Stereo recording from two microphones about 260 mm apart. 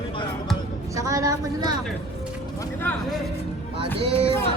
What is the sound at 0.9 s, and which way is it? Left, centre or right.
Speech, centre.